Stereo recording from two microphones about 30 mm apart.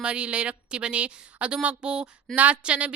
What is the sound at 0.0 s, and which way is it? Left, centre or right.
A woman's voice, right.